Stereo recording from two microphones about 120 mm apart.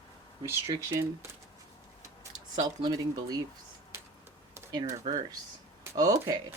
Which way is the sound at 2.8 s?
30° right (ahead or behind).